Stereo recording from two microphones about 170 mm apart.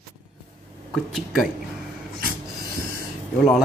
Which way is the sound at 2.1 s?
65° right (ahead or behind).